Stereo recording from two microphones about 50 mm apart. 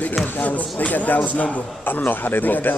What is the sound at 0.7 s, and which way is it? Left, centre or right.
A man's voice, left.